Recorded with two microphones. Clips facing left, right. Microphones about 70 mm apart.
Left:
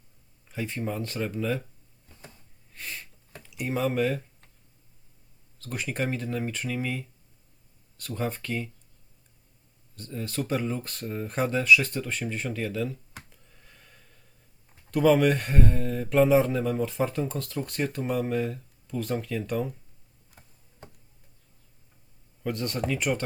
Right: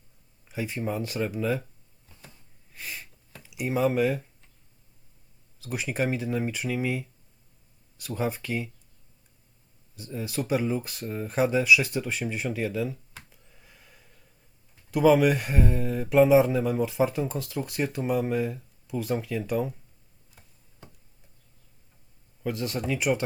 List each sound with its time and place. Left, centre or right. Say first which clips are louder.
0.4 s speech: right 1 dB; centre
2.7 s a sound: even; centre
3.4 s speech: right 3 dB; centre
5.5 s speech: right 2 dB; centre
9.9 s speech: right 1 dB; centre
13.3 s a sound: even; centre
14.8 s speech: right 1 dB; centre
22.4 s speech: even; centre